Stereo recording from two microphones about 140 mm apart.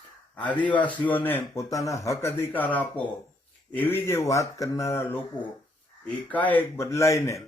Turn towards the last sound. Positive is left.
turn(degrees=20)  # may be behind; listen again after turning